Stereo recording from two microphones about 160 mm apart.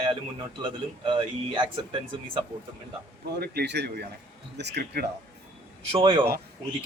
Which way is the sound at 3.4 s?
85° right.